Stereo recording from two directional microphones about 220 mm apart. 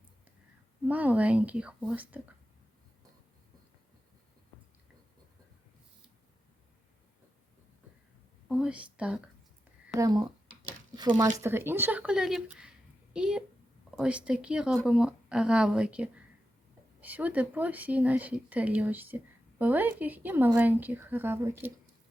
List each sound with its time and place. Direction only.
0.9 s speech: 5° right (ahead or behind)
8.5 s speech: 5° right (ahead or behind)
9.9 s speech: 15° right (ahead or behind)
11.3 s speech: 10° right (ahead or behind)